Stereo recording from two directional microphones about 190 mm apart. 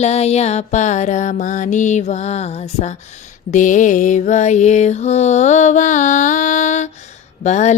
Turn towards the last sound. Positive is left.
turn(degrees=35)  # may be behind; listen again after turning